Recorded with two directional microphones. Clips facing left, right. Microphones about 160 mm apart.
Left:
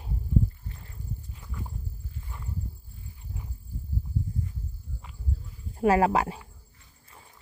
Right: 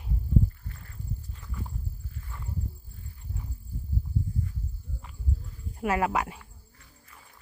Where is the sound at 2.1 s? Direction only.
20° left (ahead or behind).